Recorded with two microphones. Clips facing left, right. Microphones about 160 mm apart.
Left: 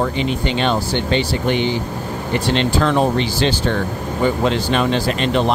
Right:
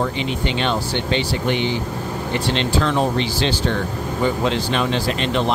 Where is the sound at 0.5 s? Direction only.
45° left (ahead or behind).